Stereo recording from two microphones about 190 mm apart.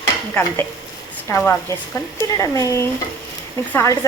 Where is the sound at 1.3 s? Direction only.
15° left (ahead or behind).